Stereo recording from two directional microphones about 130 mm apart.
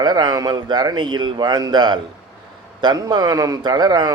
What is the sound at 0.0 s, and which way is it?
A man's voice, 30° right (ahead or behind).